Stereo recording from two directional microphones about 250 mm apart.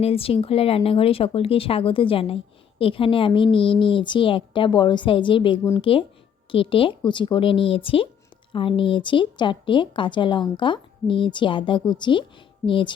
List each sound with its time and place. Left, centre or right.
0.0 s speech: left